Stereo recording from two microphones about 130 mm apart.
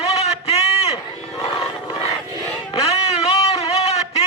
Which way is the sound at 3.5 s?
50° left (ahead or behind).